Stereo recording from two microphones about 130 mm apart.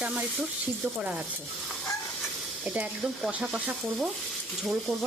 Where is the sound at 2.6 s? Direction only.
10° right (ahead or behind).